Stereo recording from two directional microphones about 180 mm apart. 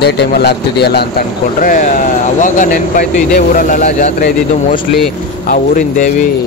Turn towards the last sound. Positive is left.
turn(degrees=45)  # may be behind; listen again after turning